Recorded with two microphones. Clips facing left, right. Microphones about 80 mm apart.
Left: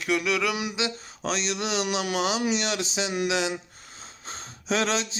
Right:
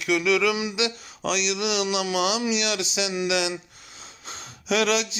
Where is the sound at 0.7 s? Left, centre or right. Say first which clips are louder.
Right 3 dB; left.